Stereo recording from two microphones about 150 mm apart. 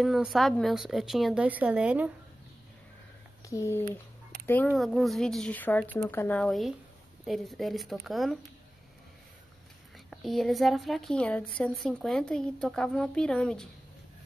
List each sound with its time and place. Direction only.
0.0 s speech: centre (ahead or behind)
3.4 s speech: 20° left (ahead or behind)
4.7 s speech: centre (ahead or behind)
9.9 s speech: centre (ahead or behind)